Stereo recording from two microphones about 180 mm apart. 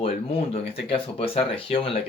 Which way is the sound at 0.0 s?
35° left (ahead or behind).